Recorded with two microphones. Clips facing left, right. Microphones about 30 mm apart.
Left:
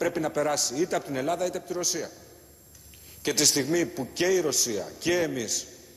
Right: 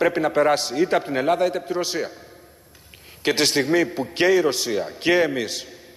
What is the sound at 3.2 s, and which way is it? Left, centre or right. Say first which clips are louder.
A man's voice: right 6 dB; right.